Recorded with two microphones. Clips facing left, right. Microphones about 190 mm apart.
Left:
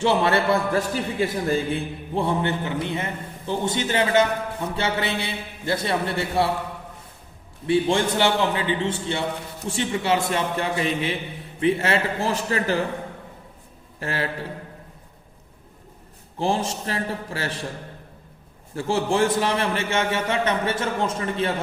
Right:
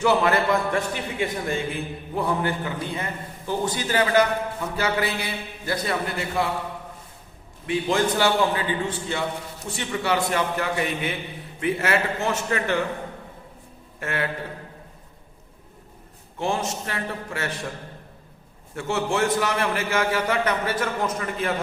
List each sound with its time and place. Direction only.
0.0 s a man's voice: 30° left (ahead or behind)
7.7 s a man's voice: 30° left (ahead or behind)
14.0 s a man's voice: 30° left (ahead or behind)
16.4 s a man's voice: 30° left (ahead or behind)
18.7 s a man's voice: 30° left (ahead or behind)